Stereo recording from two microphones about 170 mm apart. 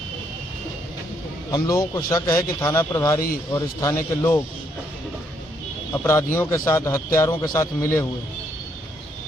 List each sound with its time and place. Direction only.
1.5 s a man's voice: 20° left (ahead or behind)
5.9 s a man's voice: 15° left (ahead or behind)